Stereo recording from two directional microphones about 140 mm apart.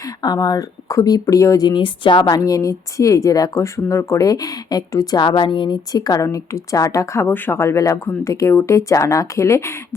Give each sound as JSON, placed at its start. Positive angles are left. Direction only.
{"t": 0.0, "sound": "speech", "side_deg": 30}